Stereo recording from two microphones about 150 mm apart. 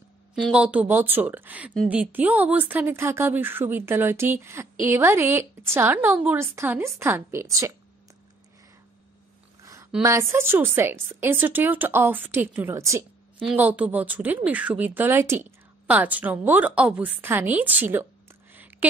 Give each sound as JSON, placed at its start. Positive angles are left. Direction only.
{"t": 0.5, "sound": "a woman's voice", "side_deg": -10}
{"t": 9.6, "sound": "a sound", "side_deg": -20}
{"t": 10.0, "sound": "a woman's voice", "side_deg": -15}
{"t": 18.5, "sound": "whispering", "side_deg": -10}